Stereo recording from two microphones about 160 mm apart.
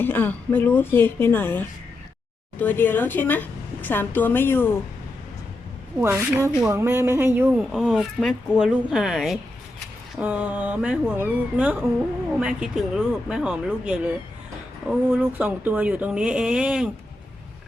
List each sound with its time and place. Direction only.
0.0 s a woman's voice: 10° left (ahead or behind)
6.0 s speech: 15° right (ahead or behind)
7.5 s speech: centre (ahead or behind)